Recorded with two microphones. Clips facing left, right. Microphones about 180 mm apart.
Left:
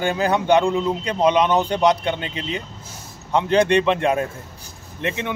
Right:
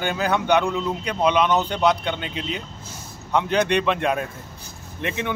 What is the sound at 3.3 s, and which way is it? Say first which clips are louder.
Speech: left 4 dB; 30° left (ahead or behind).